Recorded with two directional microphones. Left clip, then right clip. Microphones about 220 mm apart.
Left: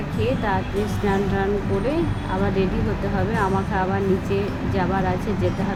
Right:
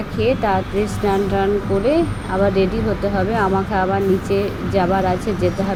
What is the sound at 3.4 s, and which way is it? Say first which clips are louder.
Speech: right 3 dB; 15° right (ahead or behind).